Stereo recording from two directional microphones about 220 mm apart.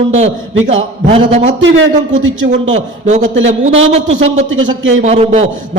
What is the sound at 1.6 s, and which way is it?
Speech, 60° right (ahead or behind).